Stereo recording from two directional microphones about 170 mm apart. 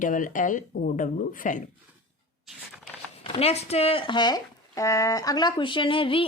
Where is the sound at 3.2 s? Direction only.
35° left (ahead or behind).